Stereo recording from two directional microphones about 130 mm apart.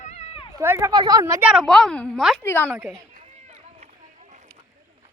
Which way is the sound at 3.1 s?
75° right (ahead or behind).